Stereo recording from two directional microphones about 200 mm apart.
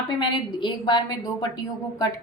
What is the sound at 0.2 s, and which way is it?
A woman's voice, 20° left (ahead or behind).